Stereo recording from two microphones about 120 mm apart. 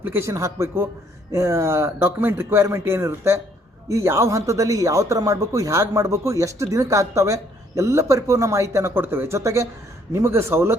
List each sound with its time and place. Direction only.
0.0 s speech: 20° right (ahead or behind)